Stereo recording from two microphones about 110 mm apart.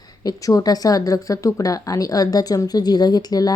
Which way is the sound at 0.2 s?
30° left (ahead or behind).